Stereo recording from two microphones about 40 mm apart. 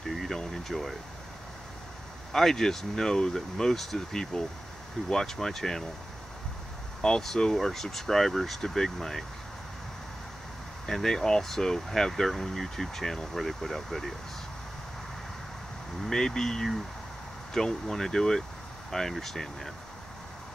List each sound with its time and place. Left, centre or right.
0.1 s a sound: centre
0.7 s speech: centre
2.3 s speech: centre
7.0 s speech: centre
10.9 s speech: centre
16.0 s speech: centre